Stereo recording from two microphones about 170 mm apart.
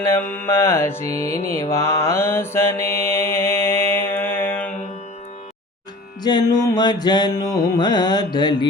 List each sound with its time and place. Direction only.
0.0 s mantra: 15° left (ahead or behind)
6.2 s mantra: 25° left (ahead or behind)